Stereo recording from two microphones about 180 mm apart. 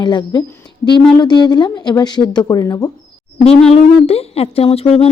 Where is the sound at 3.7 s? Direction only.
35° left (ahead or behind).